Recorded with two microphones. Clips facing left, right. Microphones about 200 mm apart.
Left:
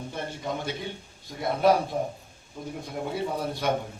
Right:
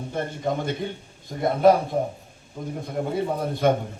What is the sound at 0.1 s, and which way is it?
Speech, 50° right (ahead or behind).